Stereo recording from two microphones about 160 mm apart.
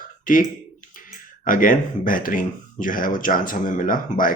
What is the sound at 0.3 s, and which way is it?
Speech, 55° left (ahead or behind).